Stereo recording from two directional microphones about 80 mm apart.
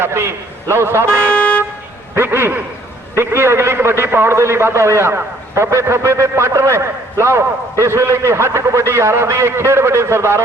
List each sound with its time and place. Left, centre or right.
0.0 s a man's voice: right
1.3 s vehicle: centre
2.1 s a man's voice: right